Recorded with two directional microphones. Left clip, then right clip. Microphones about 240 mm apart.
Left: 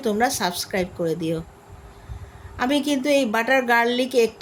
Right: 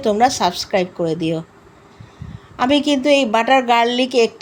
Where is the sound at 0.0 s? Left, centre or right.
Centre.